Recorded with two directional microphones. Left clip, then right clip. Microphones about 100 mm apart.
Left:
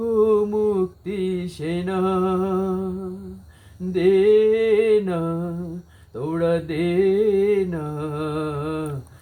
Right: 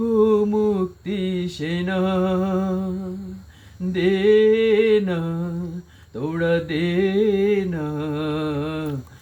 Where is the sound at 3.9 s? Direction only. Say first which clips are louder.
Left 1 dB; 40° left (ahead or behind).